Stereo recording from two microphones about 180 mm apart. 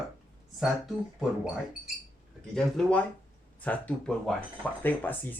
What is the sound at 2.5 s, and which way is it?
Speech, 5° left (ahead or behind).